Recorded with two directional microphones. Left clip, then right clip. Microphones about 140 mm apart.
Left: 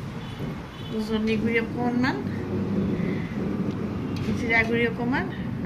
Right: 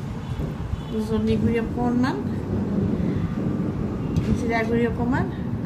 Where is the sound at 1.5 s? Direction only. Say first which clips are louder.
Right 1 dB; 15° right (ahead or behind).